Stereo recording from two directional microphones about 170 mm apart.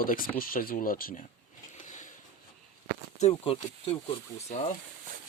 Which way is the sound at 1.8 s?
50° left (ahead or behind).